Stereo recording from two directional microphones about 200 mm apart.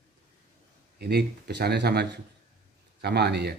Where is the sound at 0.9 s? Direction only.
55° right (ahead or behind).